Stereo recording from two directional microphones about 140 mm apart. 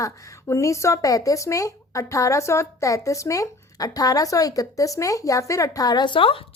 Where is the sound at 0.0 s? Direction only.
20° left (ahead or behind).